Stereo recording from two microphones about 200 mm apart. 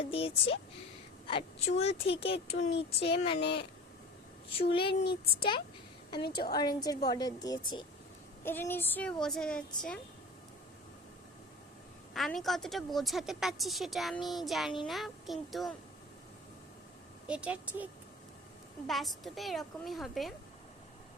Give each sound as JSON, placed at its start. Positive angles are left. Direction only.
{"t": 0.0, "sound": "a woman's voice", "side_deg": 30}
{"t": 2.6, "sound": "speech", "side_deg": 60}
{"t": 3.0, "sound": "a woman's voice", "side_deg": 30}
{"t": 3.4, "sound": "speech", "side_deg": 55}
{"t": 4.5, "sound": "a woman's voice", "side_deg": 25}
{"t": 12.1, "sound": "a woman's voice", "side_deg": 0}
{"t": 17.2, "sound": "speech", "side_deg": -5}
{"t": 18.9, "sound": "a woman's voice", "side_deg": 0}